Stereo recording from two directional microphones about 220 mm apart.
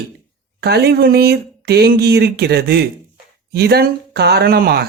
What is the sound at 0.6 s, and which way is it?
A man's voice, 45° right (ahead or behind).